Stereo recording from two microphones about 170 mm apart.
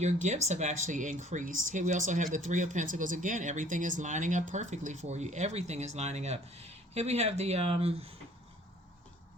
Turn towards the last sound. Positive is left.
turn(degrees=-35)  # may be behind; listen again after turning